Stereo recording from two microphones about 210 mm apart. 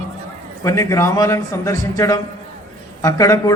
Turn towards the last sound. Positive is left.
turn(degrees=15)  # may be behind; listen again after turning